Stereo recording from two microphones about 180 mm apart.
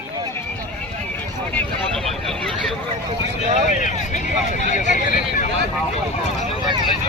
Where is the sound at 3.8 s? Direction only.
45° left (ahead or behind).